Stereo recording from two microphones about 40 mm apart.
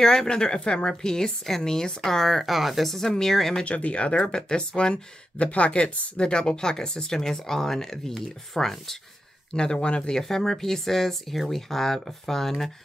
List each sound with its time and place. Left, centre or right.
0.0 s a woman's voice: centre
3.6 s a woman's voice: left; by 8.9 s centre
9.5 s speech: centre
10.2 s a woman's voice: centre